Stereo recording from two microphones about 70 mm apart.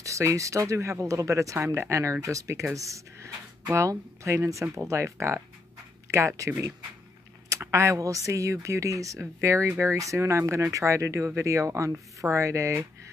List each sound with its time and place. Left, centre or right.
0.0 s speech: right